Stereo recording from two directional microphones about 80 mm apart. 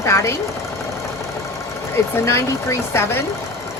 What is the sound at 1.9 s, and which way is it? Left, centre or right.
Speech, left.